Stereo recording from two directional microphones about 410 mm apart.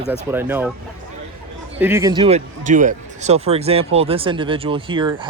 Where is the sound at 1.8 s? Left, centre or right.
Centre.